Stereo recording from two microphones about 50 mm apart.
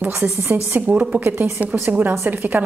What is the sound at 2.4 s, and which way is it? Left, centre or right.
Speech, right.